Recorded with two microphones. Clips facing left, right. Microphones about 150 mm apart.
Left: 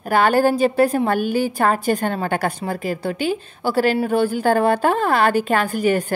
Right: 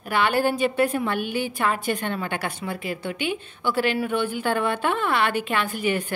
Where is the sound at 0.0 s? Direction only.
40° left (ahead or behind).